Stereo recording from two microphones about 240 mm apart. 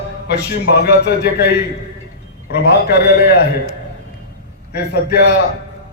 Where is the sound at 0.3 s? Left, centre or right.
Left.